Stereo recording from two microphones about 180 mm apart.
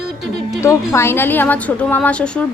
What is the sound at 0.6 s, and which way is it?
A woman's voice, 15° left (ahead or behind).